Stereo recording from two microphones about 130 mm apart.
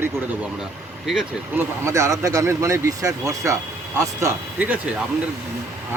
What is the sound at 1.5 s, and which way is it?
Speech, 20° right (ahead or behind).